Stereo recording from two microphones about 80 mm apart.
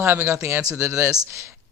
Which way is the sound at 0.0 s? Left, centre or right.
Right.